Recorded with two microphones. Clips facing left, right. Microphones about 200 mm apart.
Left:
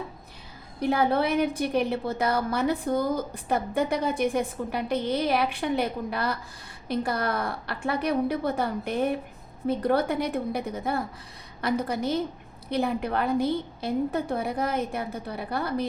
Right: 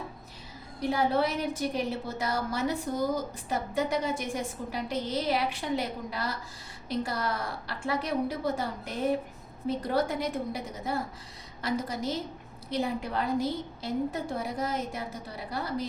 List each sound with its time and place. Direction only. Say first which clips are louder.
0.8 s a woman's voice: left 3 dB; 60° left (ahead or behind)